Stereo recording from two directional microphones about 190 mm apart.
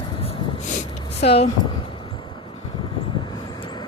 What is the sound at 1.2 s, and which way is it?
Speech, 30° left (ahead or behind).